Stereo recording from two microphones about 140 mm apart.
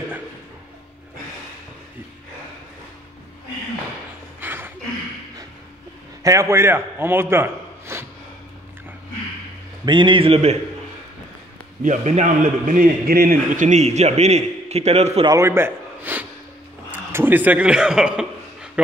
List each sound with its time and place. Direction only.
4.4 s a sound: 15° right (ahead or behind)
6.2 s a man's voice: 20° right (ahead or behind)
9.8 s a man's voice: 35° right (ahead or behind)
11.8 s a man's voice: 60° right (ahead or behind)
15.2 s a man's voice: 20° right (ahead or behind)
16.9 s a sound: 15° right (ahead or behind)